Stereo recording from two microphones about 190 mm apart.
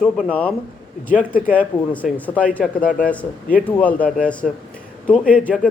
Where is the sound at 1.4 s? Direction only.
10° right (ahead or behind).